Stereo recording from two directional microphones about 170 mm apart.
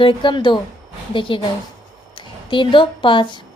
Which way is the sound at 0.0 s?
30° left (ahead or behind).